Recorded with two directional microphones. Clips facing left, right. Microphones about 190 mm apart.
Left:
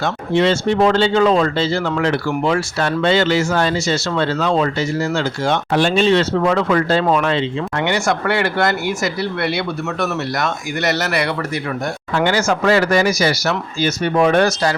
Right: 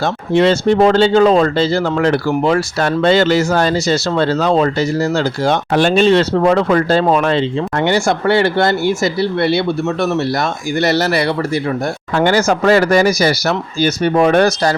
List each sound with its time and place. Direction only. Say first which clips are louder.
0.0 s speech: right 3 dB; 40° right (ahead or behind)
10.0 s speech: right 4 dB; 30° right (ahead or behind)